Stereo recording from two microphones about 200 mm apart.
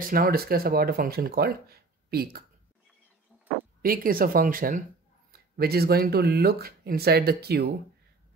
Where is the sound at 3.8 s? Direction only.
45° right (ahead or behind).